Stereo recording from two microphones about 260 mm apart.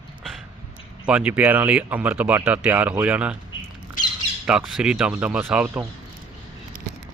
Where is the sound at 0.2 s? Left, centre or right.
Centre.